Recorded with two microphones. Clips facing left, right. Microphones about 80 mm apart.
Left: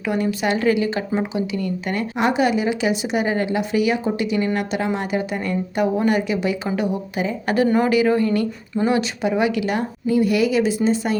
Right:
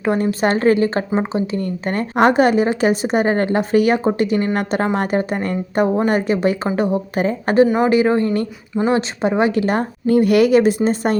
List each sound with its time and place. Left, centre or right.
0.0 s a woman's voice: right